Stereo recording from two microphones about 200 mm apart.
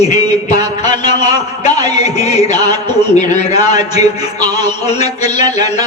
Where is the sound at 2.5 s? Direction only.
20° right (ahead or behind).